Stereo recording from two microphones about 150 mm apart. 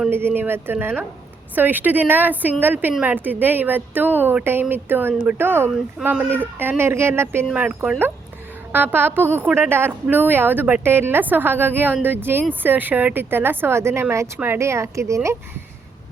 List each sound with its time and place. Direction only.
0.1 s speech: 15° right (ahead or behind)